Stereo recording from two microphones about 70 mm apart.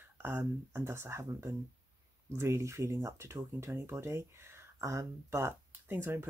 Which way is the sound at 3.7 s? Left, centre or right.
Right.